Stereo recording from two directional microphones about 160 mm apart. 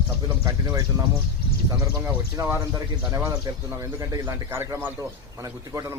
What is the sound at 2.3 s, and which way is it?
A man's voice, 20° right (ahead or behind).